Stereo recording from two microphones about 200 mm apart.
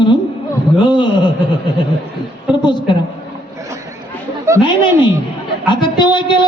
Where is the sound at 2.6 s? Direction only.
25° left (ahead or behind).